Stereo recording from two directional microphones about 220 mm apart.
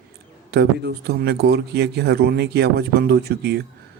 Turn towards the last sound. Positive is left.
turn(degrees=-45)  # may be behind; listen again after turning